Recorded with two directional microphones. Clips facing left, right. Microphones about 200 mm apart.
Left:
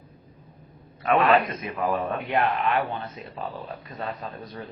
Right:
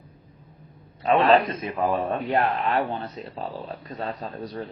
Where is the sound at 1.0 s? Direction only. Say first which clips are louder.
Right 2 dB; 30° right (ahead or behind).